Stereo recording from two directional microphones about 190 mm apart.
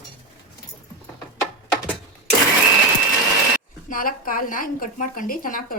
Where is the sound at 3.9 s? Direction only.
45° left (ahead or behind).